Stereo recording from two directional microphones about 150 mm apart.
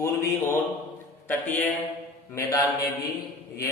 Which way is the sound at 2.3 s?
25° left (ahead or behind).